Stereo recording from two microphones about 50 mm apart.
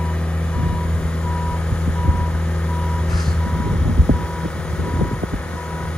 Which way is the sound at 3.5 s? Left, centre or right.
Centre.